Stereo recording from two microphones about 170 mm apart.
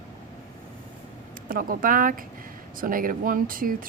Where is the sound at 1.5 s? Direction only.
55° right (ahead or behind).